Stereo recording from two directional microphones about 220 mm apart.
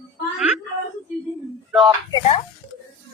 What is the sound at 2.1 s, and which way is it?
Speech, 30° left (ahead or behind).